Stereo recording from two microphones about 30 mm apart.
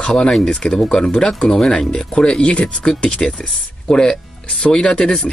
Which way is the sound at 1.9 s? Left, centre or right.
Left.